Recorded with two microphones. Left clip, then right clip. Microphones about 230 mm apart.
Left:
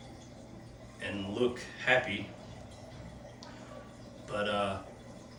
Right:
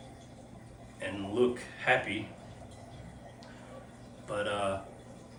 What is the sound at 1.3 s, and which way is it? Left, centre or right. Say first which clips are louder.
Speech: right 4 dB; centre.